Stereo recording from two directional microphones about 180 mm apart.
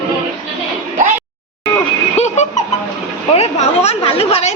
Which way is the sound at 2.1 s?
40° left (ahead or behind).